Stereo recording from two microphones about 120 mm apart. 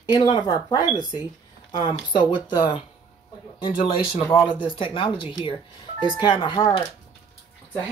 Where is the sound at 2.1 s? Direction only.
40° left (ahead or behind).